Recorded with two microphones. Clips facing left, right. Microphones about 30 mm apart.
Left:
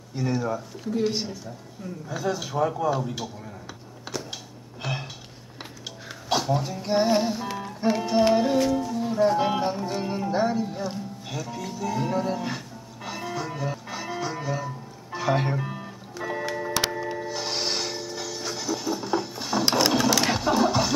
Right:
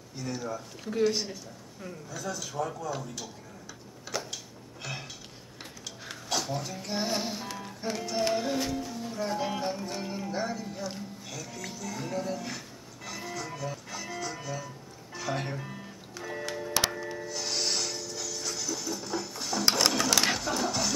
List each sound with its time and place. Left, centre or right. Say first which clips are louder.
0.1 s speech: left 8 dB; left
1.3 s speech: left 5 dB; centre
2.0 s speech: left 9 dB; left
4.1 s a sound: left 2 dB; left
6.2 s speech: left 8 dB; left
11.8 s music: left 8 dB; left
16.7 s music: even; centre
20.1 s sewing machine: left 4 dB; centre
20.3 s vehicle: left 8 dB; left